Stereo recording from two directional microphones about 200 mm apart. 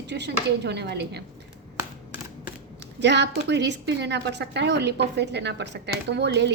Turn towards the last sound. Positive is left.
turn(degrees=-55)  # may be behind; listen again after turning